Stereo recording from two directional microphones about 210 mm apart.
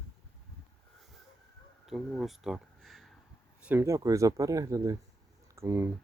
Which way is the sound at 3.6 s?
10° right (ahead or behind).